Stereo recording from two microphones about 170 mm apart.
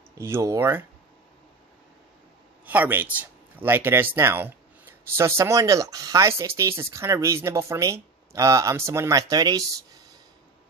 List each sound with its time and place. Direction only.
0.2 s speech: 15° right (ahead or behind)
2.6 s speech: 10° right (ahead or behind)